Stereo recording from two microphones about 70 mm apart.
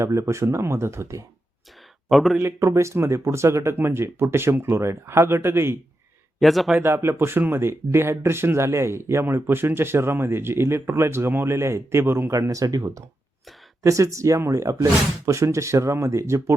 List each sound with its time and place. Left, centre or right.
0.0 s speech: right
2.0 s speech: centre
2.4 s speech: right
6.4 s speech: centre
6.7 s speech: right
12.3 s speech: right